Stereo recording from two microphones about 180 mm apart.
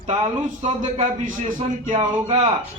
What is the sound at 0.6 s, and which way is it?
Speech, 40° right (ahead or behind).